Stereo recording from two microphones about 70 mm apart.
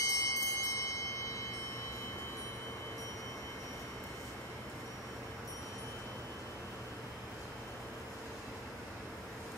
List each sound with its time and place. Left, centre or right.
0.0 s clock: left